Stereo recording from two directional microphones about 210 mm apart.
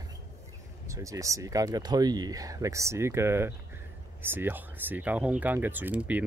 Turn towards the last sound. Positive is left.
turn(degrees=-5)  # may be behind; listen again after turning